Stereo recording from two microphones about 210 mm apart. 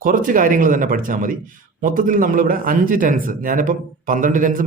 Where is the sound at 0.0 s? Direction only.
40° right (ahead or behind).